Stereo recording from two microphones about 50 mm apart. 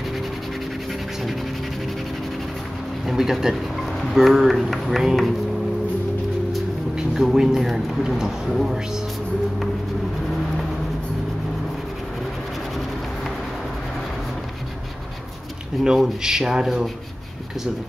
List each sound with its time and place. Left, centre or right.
3.1 s speech: centre
7.0 s speech: centre
15.8 s speech: centre